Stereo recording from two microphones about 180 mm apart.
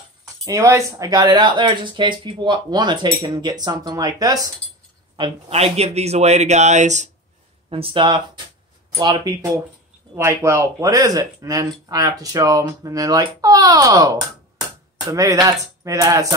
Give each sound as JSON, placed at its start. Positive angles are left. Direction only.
{"t": 0.5, "sound": "speech", "side_deg": -15}
{"t": 5.1, "sound": "speech", "side_deg": -30}
{"t": 7.7, "sound": "speech", "side_deg": -30}